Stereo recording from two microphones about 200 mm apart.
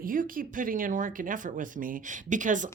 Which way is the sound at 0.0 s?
45° right (ahead or behind).